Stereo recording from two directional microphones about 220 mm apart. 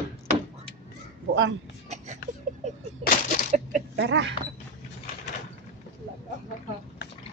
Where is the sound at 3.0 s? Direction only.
40° left (ahead or behind).